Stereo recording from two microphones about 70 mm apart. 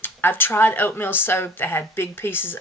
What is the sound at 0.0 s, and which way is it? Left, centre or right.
Speech, left.